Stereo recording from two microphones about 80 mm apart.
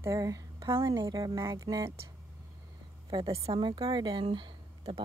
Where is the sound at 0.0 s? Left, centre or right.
Right.